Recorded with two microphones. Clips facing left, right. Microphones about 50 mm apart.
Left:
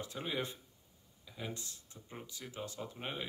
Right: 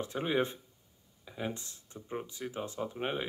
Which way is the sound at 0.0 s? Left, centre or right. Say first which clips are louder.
Right 8 dB; right.